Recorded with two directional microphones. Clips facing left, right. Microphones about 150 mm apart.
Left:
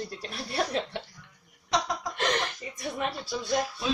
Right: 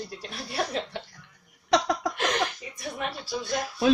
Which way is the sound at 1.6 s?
60° right (ahead or behind).